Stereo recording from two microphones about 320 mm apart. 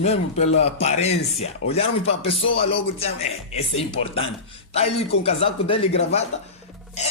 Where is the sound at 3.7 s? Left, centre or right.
Centre.